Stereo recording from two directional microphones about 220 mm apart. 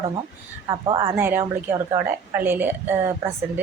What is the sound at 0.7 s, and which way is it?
Speech, 25° right (ahead or behind).